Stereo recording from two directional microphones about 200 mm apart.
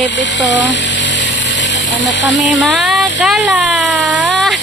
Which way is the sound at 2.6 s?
Centre (ahead or behind).